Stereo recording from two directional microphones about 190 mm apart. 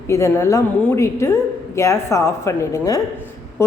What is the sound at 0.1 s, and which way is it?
A woman's voice, 15° left (ahead or behind).